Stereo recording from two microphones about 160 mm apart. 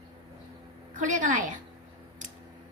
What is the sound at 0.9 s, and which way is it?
Speech, 55° right (ahead or behind).